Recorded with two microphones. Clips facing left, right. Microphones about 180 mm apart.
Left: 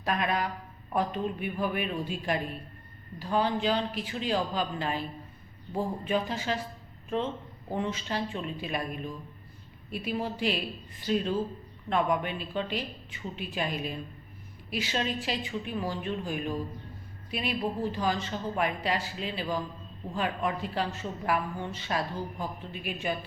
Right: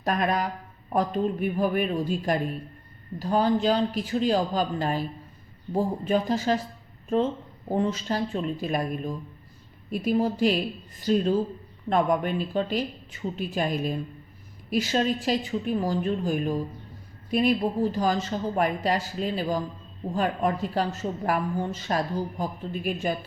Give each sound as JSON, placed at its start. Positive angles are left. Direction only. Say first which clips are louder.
{"t": 0.0, "sound": "a woman's voice", "louder": "right 4 dB", "side_deg": -45}
{"t": 7.7, "sound": "a woman's voice", "louder": "right 6 dB", "side_deg": -40}